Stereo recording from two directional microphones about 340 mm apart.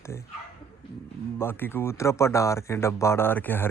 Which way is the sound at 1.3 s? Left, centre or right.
Centre.